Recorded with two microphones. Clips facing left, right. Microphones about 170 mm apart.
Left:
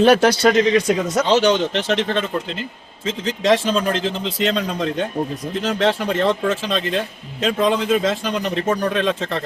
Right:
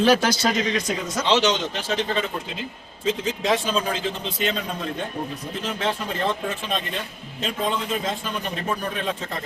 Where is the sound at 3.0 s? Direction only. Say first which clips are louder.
Left 2 dB; 90° left.